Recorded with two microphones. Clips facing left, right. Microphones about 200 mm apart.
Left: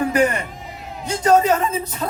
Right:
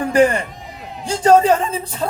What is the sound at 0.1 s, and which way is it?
A man's voice, 30° right (ahead or behind).